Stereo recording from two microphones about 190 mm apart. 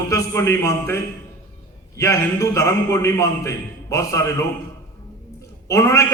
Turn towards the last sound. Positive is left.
turn(degrees=15)  # may be behind; listen again after turning